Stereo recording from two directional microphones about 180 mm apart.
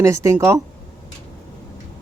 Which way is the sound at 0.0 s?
15° right (ahead or behind).